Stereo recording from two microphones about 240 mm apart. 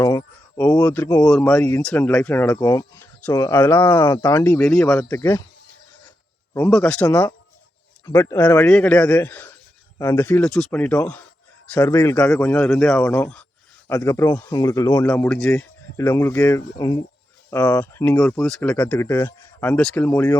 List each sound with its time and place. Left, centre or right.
0.0 s speech: centre
4.9 s speech: centre
6.5 s speech: centre